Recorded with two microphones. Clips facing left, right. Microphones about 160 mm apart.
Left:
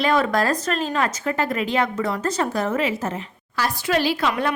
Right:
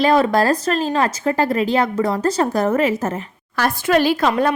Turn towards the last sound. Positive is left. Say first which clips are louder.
# right 5 dB
turn(degrees=-40)  # may be behind; listen again after turning